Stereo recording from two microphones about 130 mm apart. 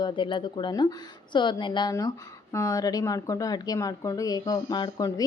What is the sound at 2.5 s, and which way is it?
A woman's voice, 25° left (ahead or behind).